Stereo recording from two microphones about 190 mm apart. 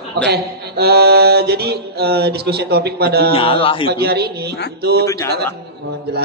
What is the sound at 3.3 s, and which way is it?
Speech, 30° left (ahead or behind).